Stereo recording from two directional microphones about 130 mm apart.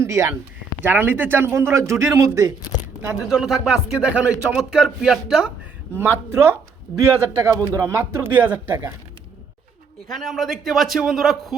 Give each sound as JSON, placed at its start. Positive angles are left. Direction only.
{"t": 0.0, "sound": "a man's voice", "side_deg": -20}
{"t": 3.2, "sound": "speech", "side_deg": -5}
{"t": 6.0, "sound": "a man's voice", "side_deg": -20}
{"t": 10.1, "sound": "speech", "side_deg": 0}